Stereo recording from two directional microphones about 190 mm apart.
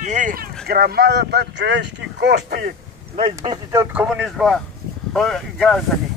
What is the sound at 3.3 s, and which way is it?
Speech, 20° right (ahead or behind).